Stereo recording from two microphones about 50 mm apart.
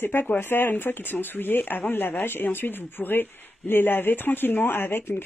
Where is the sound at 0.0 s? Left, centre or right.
Left.